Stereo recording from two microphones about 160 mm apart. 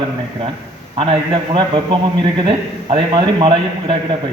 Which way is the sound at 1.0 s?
35° right (ahead or behind).